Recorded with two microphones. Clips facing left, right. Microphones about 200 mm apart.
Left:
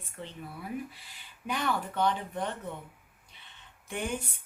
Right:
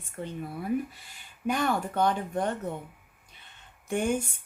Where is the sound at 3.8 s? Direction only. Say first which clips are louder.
Right 7 dB; 45° right (ahead or behind).